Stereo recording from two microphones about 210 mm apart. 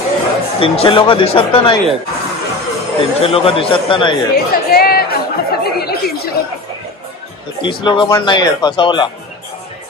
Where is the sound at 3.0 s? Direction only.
25° left (ahead or behind).